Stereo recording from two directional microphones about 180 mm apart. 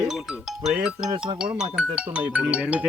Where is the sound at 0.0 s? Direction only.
5° right (ahead or behind).